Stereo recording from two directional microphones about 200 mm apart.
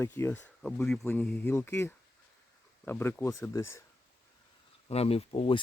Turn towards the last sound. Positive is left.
turn(degrees=30)  # may be behind; listen again after turning